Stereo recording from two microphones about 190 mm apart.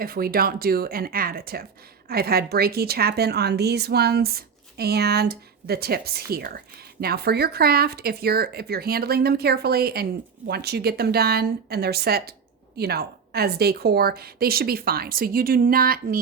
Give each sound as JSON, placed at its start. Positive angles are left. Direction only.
{"t": 0.0, "sound": "a woman's voice", "side_deg": -50}